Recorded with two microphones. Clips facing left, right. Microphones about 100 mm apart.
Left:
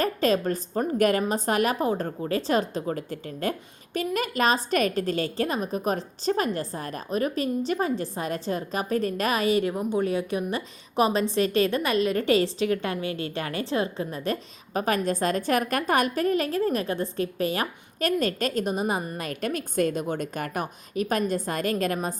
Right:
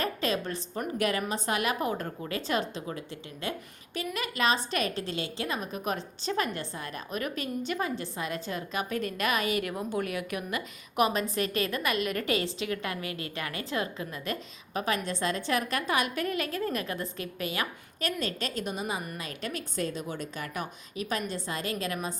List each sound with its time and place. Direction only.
0.0 s a woman's voice: 40° left (ahead or behind)
1.7 s a woman's voice: 30° left (ahead or behind)